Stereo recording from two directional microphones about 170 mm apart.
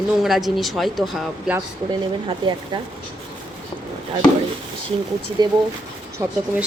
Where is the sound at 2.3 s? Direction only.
25° right (ahead or behind).